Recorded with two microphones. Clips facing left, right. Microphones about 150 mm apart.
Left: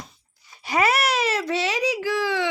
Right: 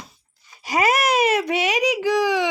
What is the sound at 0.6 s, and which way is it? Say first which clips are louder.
Speech: right 2 dB; 45° right (ahead or behind).